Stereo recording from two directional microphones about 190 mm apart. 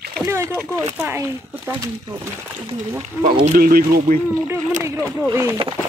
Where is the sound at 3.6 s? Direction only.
50° right (ahead or behind).